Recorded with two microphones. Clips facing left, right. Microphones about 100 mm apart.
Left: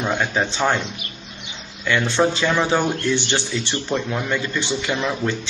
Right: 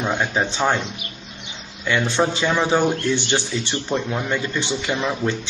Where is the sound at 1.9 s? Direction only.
15° right (ahead or behind).